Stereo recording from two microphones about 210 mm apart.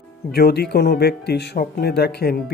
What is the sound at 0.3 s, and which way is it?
Speech, 50° left (ahead or behind).